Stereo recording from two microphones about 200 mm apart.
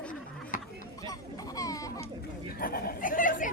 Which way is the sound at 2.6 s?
45° left (ahead or behind).